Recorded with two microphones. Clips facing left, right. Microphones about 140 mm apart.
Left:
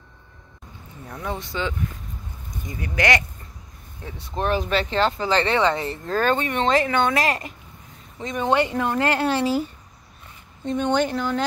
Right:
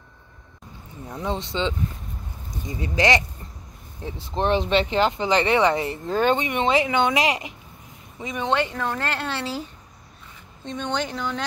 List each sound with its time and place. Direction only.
1.0 s speech: 20° right (ahead or behind); by 8.5 s 5° right (ahead or behind)
8.5 s speech: 10° left (ahead or behind)